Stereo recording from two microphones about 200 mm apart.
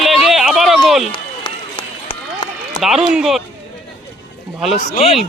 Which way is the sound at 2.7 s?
Centre (ahead or behind).